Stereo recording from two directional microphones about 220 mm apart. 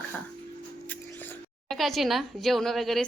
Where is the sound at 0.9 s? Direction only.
10° left (ahead or behind).